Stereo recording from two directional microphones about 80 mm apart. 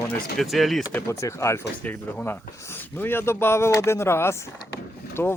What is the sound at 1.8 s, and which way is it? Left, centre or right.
Speech, left.